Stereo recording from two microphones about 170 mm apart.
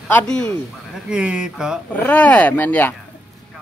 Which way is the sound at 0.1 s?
5° left (ahead or behind).